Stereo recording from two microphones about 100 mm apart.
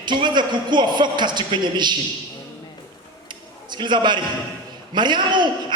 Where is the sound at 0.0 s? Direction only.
50° right (ahead or behind).